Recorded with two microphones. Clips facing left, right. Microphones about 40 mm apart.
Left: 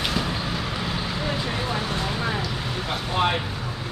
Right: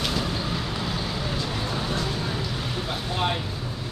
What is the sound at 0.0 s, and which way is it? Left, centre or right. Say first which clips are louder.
Vehicle: left 1 dB; centre.